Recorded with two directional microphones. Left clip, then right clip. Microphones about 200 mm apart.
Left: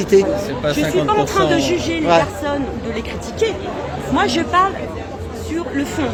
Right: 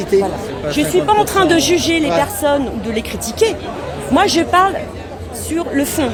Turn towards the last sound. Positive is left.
turn(degrees=-45)  # may be behind; listen again after turning